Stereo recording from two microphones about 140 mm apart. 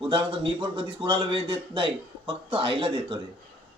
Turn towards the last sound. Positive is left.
turn(degrees=-40)  # may be behind; listen again after turning